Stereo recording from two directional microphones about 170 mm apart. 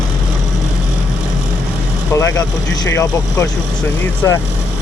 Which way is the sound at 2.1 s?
20° left (ahead or behind).